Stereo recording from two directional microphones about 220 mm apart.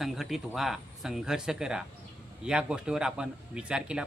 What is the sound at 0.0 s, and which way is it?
Speech, centre (ahead or behind).